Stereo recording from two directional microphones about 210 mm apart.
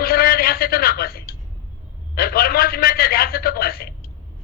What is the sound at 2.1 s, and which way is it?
A man's voice, 45° left (ahead or behind).